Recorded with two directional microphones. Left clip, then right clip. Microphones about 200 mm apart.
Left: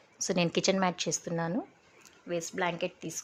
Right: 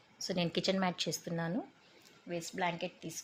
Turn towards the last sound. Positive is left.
turn(degrees=45)  # may be behind; listen again after turning